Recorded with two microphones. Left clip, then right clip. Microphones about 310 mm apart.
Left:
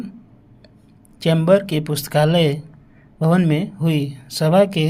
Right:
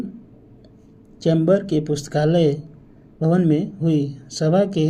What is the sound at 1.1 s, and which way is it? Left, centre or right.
Speech, left.